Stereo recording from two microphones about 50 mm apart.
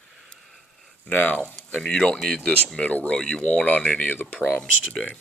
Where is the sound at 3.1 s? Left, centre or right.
Centre.